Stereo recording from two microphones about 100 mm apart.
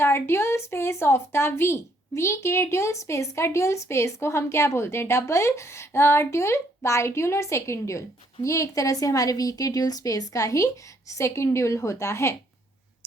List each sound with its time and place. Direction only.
0.0 s a woman's voice: 25° left (ahead or behind)